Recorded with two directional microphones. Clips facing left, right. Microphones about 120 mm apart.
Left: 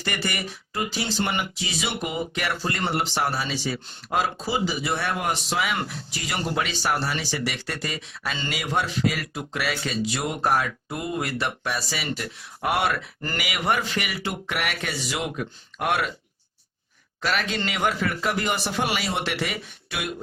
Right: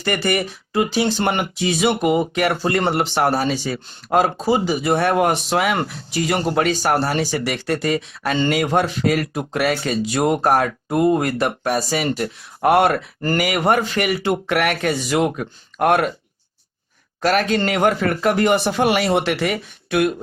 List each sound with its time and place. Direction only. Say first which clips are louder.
0.0 s speech: right 9 dB; 50° right (ahead or behind)
17.2 s speech: right 9 dB; 45° right (ahead or behind)